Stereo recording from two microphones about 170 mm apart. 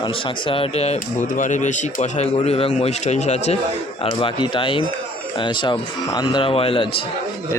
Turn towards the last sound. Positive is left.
turn(degrees=30)  # may be behind; listen again after turning